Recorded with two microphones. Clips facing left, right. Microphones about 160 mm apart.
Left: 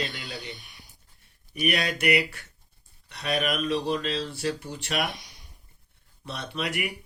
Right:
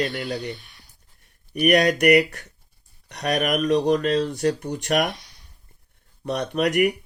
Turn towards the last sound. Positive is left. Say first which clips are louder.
# right 11 dB
turn(degrees=-60)  # may be behind; listen again after turning